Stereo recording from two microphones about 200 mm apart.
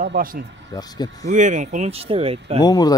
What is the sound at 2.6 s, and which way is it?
Speech, 20° left (ahead or behind).